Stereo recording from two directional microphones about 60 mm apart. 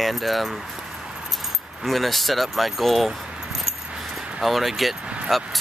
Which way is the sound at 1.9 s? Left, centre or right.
Centre.